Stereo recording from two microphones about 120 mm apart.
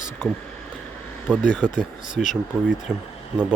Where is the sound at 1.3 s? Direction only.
5° right (ahead or behind).